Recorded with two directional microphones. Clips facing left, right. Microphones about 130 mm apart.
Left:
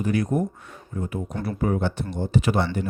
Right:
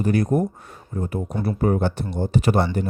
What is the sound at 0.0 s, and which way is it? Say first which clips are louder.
Speech: right 3 dB; 40° right (ahead or behind).